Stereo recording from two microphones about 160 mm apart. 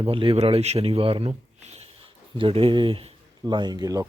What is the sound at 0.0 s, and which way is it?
Speech, 35° right (ahead or behind).